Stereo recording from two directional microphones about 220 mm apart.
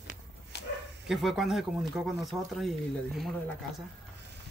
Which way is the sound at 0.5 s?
50° left (ahead or behind).